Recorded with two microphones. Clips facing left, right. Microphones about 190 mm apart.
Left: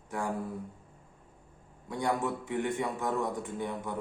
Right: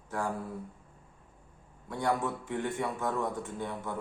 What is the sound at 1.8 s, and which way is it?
A man's voice, 15° left (ahead or behind).